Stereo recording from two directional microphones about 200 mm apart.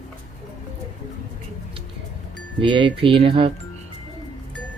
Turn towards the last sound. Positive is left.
turn(degrees=-25)  # may be behind; listen again after turning